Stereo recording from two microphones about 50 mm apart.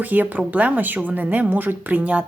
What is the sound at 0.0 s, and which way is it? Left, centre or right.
A woman's voice, right.